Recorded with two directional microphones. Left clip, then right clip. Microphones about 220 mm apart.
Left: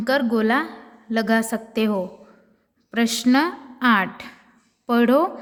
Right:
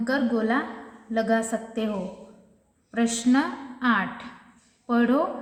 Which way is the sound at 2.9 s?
40° left (ahead or behind).